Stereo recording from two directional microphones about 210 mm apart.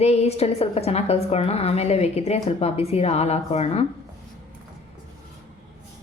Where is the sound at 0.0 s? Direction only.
30° left (ahead or behind).